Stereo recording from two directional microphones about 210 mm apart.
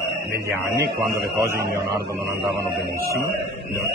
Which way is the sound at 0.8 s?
50° right (ahead or behind).